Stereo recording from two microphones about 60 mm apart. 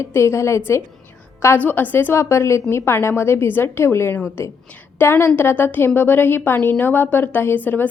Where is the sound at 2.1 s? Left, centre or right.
Left.